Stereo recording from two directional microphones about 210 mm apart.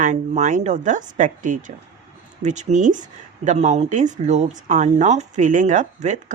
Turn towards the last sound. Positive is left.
turn(degrees=-35)  # may be behind; listen again after turning